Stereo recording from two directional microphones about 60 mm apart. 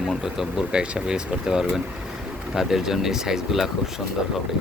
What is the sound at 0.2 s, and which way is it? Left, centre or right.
Speech, centre.